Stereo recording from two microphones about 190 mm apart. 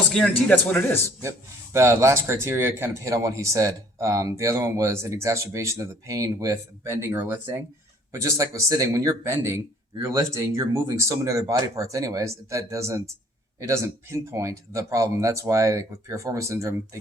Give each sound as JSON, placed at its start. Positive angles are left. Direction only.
{"t": 0.1, "sound": "speech", "side_deg": 5}
{"t": 1.7, "sound": "speech", "side_deg": -15}